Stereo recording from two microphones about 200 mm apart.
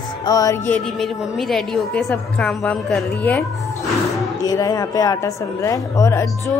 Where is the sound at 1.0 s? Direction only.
Centre (ahead or behind).